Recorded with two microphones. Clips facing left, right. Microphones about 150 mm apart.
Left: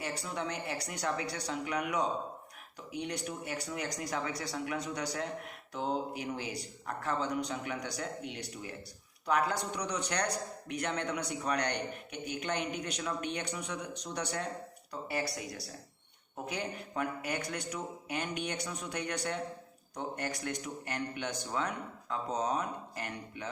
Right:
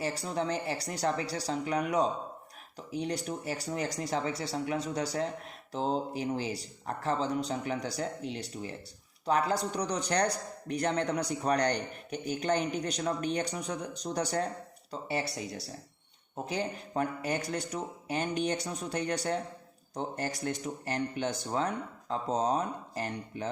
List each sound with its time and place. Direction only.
0.0 s a man's voice: 35° right (ahead or behind)
15.0 s a man's voice: 30° right (ahead or behind)